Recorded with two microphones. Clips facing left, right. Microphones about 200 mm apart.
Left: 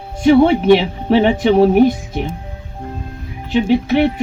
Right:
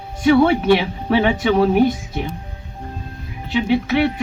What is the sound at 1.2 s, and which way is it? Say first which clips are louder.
Speech: left 4 dB; 40° left (ahead or behind).